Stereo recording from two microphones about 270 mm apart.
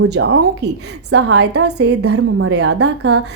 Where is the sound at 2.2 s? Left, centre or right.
Right.